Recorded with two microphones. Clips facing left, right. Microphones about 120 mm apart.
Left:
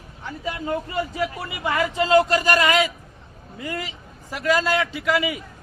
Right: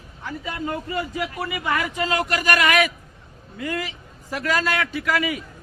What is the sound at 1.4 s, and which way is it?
Speech, 25° left (ahead or behind).